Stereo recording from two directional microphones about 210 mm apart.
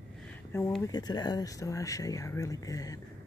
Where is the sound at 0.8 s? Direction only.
20° left (ahead or behind).